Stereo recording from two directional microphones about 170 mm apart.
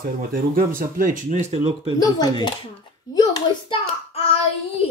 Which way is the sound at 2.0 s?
25° left (ahead or behind).